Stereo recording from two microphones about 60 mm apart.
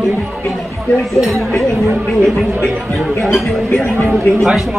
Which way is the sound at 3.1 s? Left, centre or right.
Left.